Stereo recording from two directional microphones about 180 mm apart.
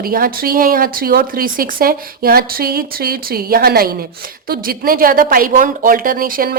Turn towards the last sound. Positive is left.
turn(degrees=-50)  # may be behind; listen again after turning